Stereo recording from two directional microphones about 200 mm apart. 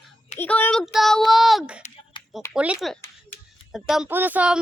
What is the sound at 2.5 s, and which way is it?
Speech, 5° right (ahead or behind).